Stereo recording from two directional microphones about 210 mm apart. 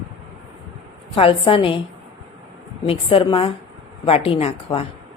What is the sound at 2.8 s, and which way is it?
A woman's voice, 25° left (ahead or behind).